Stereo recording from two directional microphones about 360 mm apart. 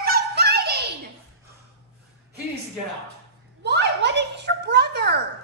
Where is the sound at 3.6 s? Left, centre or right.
Right.